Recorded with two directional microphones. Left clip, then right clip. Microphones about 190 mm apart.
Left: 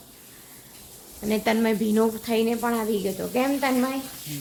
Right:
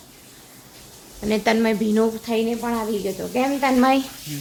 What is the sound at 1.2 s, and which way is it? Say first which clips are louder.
Speech: right 4 dB; 5° right (ahead or behind).